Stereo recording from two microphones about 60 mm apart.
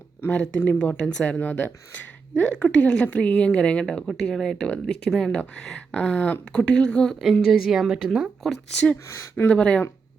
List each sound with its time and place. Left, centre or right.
0.2 s speech: left
0.8 s a woman's voice: centre
5.3 s a woman's voice: centre
6.6 s a woman's voice: centre
7.4 s a woman's voice: centre
8.4 s a woman's voice: centre
9.0 s speech: left
9.5 s a woman's voice: centre